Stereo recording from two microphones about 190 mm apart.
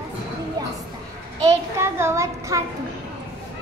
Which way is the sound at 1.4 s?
15° right (ahead or behind).